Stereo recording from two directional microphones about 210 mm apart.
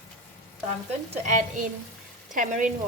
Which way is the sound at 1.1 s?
35° right (ahead or behind).